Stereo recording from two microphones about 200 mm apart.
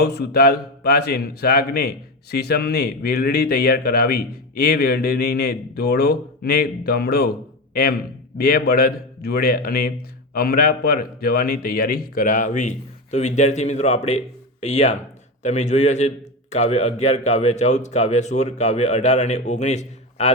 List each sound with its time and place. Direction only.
0.0 s a man's voice: 55° left (ahead or behind); by 20.3 s 35° left (ahead or behind)